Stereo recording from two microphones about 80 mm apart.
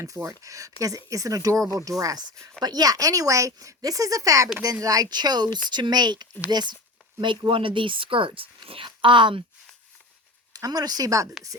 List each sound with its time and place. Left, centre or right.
0.3 s speech: right
7.2 s speech: right
10.5 s speech: right